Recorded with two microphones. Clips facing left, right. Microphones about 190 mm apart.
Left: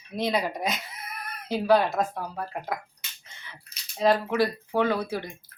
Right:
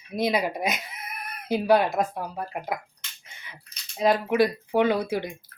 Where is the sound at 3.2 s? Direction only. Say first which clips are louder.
Even; 15° right (ahead or behind).